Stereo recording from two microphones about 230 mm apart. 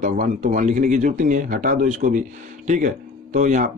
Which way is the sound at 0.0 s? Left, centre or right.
Right.